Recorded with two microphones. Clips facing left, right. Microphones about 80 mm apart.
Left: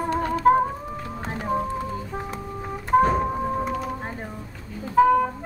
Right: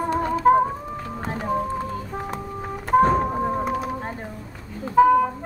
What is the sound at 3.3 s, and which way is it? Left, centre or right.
Music, right.